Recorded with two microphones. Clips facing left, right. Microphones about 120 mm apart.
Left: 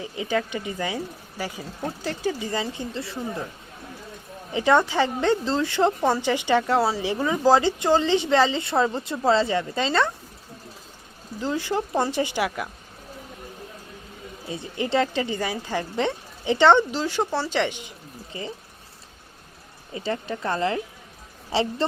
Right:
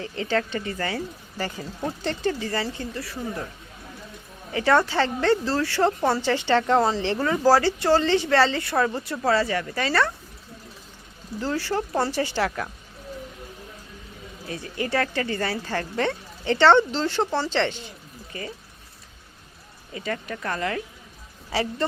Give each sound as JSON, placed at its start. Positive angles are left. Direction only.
{"t": 0.0, "sound": "speech", "side_deg": 15}
{"t": 4.5, "sound": "speech", "side_deg": 15}
{"t": 11.3, "sound": "speech", "side_deg": 15}
{"t": 14.4, "sound": "speech", "side_deg": 20}
{"t": 19.9, "sound": "speech", "side_deg": 30}